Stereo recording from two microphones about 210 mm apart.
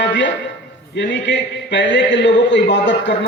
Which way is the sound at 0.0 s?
60° left (ahead or behind).